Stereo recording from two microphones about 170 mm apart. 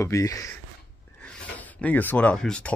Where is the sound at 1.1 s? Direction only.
10° left (ahead or behind).